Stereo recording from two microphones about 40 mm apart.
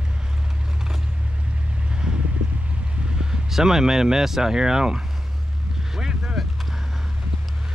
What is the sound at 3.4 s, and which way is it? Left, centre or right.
Speech, centre.